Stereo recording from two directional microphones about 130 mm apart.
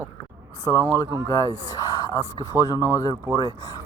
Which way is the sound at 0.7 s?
25° left (ahead or behind).